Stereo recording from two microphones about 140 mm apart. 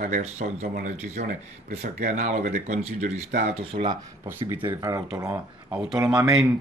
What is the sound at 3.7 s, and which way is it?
Speech, 70° right (ahead or behind).